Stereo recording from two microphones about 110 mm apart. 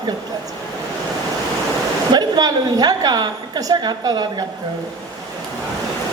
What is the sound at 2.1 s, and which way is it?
A woman's voice, 40° right (ahead or behind).